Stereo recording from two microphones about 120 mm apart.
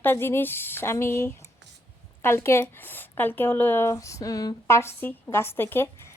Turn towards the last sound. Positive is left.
turn(degrees=20)  # may be behind; listen again after turning